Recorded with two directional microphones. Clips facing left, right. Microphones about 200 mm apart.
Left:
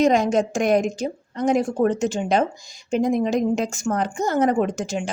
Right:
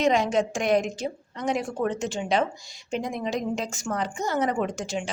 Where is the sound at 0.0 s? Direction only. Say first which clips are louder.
Left 4 dB; 45° left (ahead or behind).